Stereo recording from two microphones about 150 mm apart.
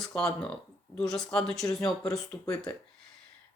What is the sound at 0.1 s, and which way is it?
Speech, 5° left (ahead or behind).